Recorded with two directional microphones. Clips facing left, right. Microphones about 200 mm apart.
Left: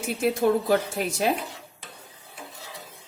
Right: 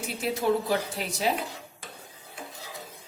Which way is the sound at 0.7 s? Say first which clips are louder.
Left 5 dB; 50° left (ahead or behind).